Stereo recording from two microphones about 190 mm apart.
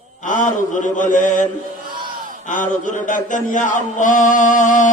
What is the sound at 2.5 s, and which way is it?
Music, 40° left (ahead or behind).